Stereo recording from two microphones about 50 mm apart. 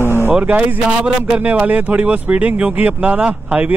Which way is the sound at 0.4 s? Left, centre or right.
Right.